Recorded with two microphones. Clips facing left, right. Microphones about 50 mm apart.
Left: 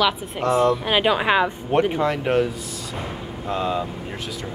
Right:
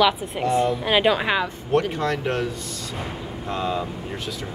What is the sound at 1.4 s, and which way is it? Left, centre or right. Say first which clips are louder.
Speech: left 2 dB; left.